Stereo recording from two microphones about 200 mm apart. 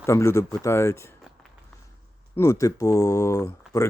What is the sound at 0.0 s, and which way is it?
Speech, 15° left (ahead or behind).